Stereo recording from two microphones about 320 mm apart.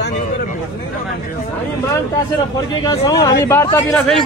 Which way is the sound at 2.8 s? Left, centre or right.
Centre.